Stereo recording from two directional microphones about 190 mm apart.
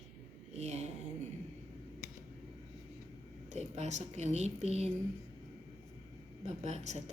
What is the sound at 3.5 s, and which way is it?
A woman's voice, 35° right (ahead or behind).